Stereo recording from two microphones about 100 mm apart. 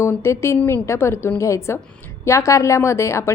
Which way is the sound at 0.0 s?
25° left (ahead or behind).